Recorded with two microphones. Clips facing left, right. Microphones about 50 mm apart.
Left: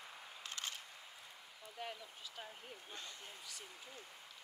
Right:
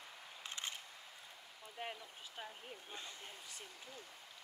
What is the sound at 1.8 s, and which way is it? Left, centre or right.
Speech, right.